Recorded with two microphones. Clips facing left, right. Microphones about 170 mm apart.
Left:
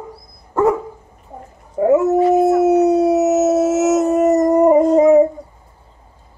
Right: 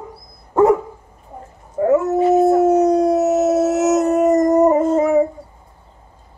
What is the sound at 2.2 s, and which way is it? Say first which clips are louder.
Howl: even; 25° right (ahead or behind).